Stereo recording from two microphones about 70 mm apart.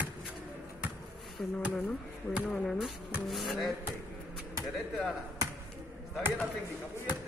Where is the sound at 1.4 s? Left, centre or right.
Centre.